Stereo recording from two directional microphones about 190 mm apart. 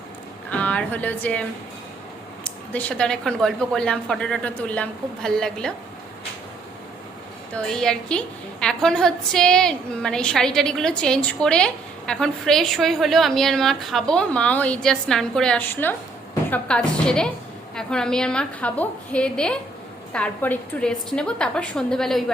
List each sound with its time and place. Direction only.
0.5 s a woman's voice: 5° left (ahead or behind)
2.7 s a woman's voice: 5° left (ahead or behind)
7.5 s a woman's voice: 5° left (ahead or behind)